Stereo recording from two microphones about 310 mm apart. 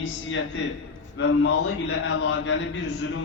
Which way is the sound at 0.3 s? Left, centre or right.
Left.